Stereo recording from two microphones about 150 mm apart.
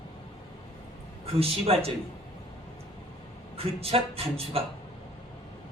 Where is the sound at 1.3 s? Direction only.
40° right (ahead or behind).